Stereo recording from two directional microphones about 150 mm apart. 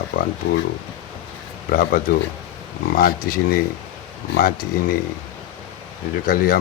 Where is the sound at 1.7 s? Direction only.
75° left (ahead or behind).